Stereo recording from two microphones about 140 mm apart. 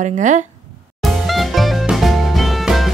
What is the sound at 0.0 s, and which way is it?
Speech, 60° right (ahead or behind).